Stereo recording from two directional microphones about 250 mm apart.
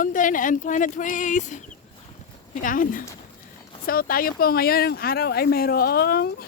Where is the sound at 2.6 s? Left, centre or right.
Left.